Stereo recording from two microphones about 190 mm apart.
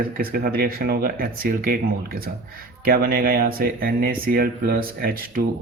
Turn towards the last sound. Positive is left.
turn(degrees=-50)  # may be behind; listen again after turning